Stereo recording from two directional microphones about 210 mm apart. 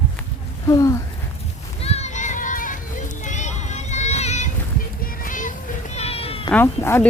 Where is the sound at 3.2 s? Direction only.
35° left (ahead or behind).